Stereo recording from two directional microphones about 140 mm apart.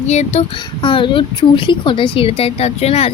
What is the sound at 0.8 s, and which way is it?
A woman's voice, 35° left (ahead or behind).